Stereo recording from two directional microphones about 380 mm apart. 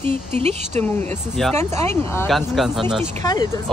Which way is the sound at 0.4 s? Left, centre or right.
Centre.